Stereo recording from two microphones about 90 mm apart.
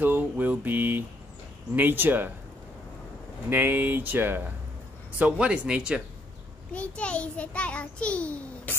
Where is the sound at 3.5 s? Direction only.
20° right (ahead or behind).